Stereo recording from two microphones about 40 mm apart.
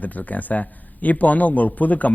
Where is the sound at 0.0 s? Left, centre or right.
Left.